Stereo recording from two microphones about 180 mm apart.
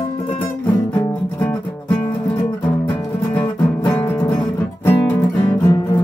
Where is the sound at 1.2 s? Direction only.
5° left (ahead or behind).